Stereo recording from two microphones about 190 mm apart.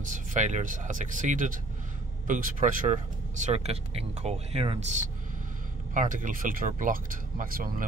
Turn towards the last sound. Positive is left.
turn(degrees=-45)  # may be behind; listen again after turning